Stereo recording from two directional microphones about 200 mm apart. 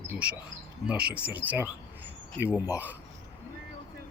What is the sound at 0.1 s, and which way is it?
Speech, 5° right (ahead or behind).